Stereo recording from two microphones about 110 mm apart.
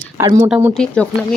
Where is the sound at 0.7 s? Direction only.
10° left (ahead or behind).